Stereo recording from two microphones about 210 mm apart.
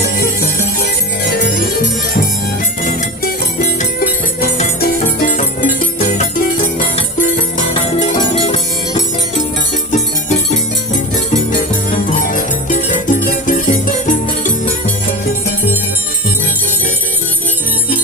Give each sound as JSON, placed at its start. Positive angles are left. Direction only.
{"t": 1.3, "sound": "music", "side_deg": 45}
{"t": 4.4, "sound": "music", "side_deg": 40}
{"t": 11.9, "sound": "music", "side_deg": 35}